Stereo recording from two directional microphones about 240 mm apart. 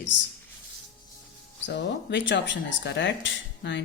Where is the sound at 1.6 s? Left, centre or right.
Left.